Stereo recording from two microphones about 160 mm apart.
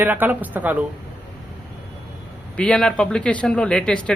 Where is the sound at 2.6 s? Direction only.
5° left (ahead or behind).